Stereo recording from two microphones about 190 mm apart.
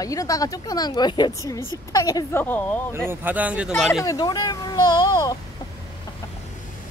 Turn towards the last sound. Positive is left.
turn(degrees=20)  # may be behind; listen again after turning